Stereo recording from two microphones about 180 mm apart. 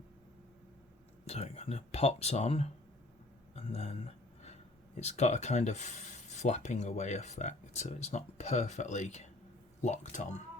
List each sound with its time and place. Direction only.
1.3 s speech: 35° left (ahead or behind)
4.9 s speech: 40° left (ahead or behind)